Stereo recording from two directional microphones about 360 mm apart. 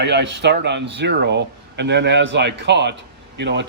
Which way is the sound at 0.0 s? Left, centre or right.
Right.